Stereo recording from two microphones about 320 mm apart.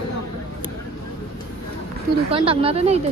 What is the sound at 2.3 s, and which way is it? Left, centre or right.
Speech, centre.